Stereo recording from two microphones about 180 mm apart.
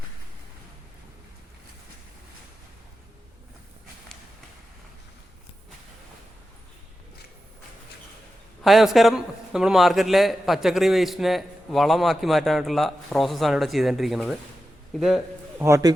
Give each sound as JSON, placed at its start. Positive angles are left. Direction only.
{"t": 8.6, "sound": "a man's voice", "side_deg": 0}
{"t": 15.6, "sound": "a man's voice", "side_deg": -20}